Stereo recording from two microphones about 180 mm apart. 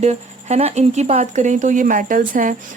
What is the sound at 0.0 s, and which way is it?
Speech, 40° right (ahead or behind).